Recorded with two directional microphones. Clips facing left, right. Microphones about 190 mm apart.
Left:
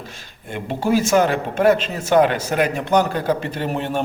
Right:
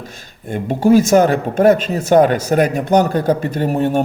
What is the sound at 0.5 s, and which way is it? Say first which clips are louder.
Speech: right 7 dB; 45° right (ahead or behind).